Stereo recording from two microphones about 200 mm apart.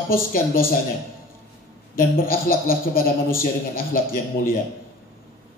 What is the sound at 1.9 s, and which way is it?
A man's voice, 45° left (ahead or behind).